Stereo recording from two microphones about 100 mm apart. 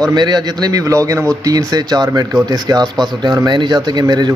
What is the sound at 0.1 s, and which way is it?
A man's voice, 45° right (ahead or behind).